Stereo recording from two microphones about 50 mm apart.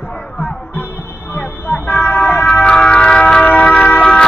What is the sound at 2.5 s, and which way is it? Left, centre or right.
Music, centre.